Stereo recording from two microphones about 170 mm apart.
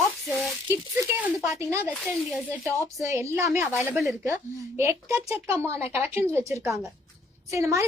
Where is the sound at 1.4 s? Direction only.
15° right (ahead or behind).